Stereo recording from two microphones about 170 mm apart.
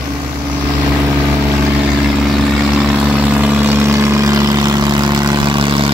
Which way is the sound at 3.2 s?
10° right (ahead or behind).